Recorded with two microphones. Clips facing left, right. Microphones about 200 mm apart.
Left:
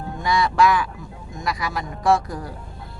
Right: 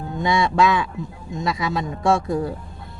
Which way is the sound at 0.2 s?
25° right (ahead or behind).